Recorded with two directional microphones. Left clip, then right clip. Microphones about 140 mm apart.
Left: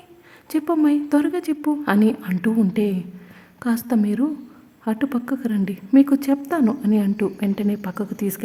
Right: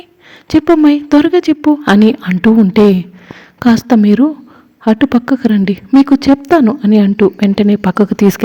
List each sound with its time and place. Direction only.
0.4 s a woman's voice: 35° right (ahead or behind); by 8.4 s 55° right (ahead or behind)